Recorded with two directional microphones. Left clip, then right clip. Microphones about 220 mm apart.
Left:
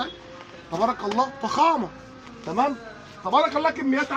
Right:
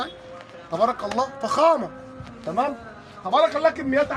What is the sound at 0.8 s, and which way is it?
Speech, 25° right (ahead or behind).